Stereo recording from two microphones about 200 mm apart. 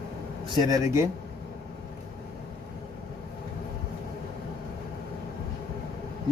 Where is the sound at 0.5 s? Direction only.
15° right (ahead or behind).